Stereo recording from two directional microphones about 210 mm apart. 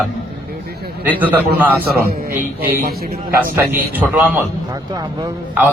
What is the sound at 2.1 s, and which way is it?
Speech, 45° right (ahead or behind).